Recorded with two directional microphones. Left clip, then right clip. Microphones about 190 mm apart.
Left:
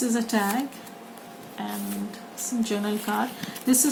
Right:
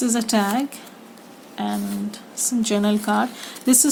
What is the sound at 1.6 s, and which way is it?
A woman's voice, 50° right (ahead or behind).